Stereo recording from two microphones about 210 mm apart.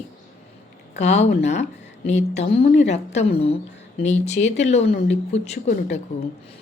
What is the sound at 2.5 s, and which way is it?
A woman's voice, 45° left (ahead or behind).